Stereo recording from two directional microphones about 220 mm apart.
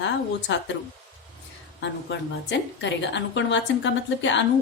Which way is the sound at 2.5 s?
55° left (ahead or behind).